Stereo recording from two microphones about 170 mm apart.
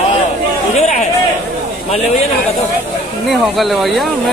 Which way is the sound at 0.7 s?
40° left (ahead or behind).